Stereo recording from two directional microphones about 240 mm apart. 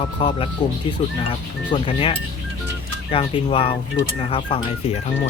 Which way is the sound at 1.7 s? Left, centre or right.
Left.